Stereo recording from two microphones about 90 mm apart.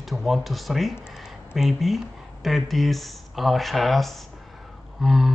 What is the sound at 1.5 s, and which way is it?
Speech, centre (ahead or behind).